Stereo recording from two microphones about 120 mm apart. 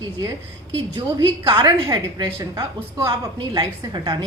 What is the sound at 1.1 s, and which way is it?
A woman's voice, 35° right (ahead or behind).